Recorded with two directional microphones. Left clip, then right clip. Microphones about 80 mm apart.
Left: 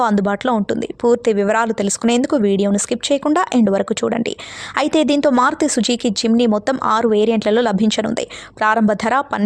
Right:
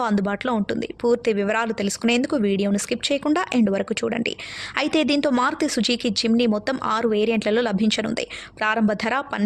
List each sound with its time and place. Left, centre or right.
0.0 s a woman's voice: left